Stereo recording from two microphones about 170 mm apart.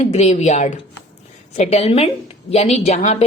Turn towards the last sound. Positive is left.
turn(degrees=40)  # may be behind; listen again after turning